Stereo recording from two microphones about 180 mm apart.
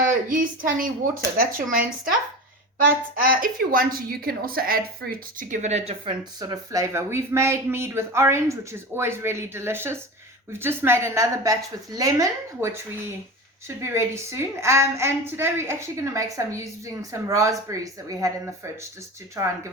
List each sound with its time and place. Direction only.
0.1 s a woman's voice: 50° right (ahead or behind)
2.8 s a woman's voice: 55° right (ahead or behind); by 6.1 s 35° right (ahead or behind)
6.4 s a woman's voice: 20° right (ahead or behind)